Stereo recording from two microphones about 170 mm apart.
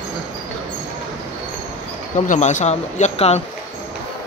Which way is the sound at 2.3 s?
45° left (ahead or behind).